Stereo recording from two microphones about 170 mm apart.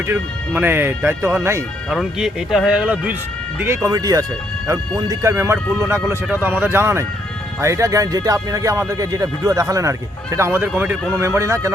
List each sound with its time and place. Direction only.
0.1 s speech: 10° right (ahead or behind)
1.9 s speech: 5° right (ahead or behind)
3.8 s speech: 20° right (ahead or behind)